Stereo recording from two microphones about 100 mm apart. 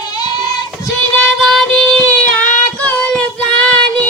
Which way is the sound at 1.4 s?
Centre (ahead or behind).